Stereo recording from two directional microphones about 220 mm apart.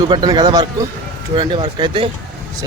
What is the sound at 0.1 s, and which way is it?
Speech, 20° right (ahead or behind).